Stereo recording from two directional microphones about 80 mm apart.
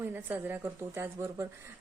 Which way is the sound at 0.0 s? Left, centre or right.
Right.